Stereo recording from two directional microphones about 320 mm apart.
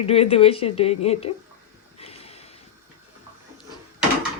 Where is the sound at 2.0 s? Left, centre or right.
Centre.